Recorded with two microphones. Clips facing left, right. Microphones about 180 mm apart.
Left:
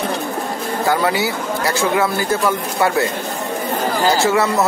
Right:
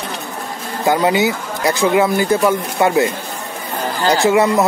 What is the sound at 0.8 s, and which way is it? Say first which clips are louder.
Speech: right 4 dB; 20° right (ahead or behind).